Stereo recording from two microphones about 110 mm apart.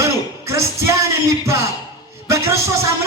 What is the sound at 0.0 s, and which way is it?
Music, 25° right (ahead or behind).